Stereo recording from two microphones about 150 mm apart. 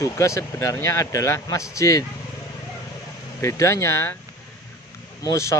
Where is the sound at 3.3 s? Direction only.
20° left (ahead or behind).